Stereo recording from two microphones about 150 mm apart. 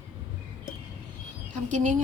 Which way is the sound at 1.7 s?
55° right (ahead or behind).